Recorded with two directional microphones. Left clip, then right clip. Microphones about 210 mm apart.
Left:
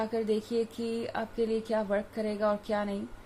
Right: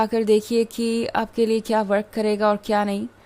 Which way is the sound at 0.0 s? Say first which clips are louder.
Right 11 dB; 50° right (ahead or behind).